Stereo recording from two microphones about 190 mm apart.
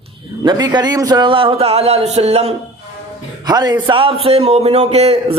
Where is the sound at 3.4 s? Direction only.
20° right (ahead or behind).